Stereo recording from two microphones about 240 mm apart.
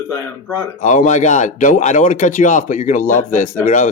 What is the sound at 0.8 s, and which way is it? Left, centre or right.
Speech, left.